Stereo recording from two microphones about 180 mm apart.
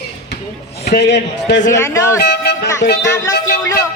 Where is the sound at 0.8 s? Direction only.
65° left (ahead or behind).